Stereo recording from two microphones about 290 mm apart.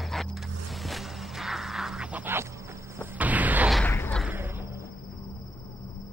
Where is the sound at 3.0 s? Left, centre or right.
Centre.